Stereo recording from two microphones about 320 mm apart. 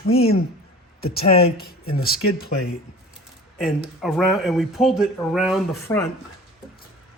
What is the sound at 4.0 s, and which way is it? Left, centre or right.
Speech, centre.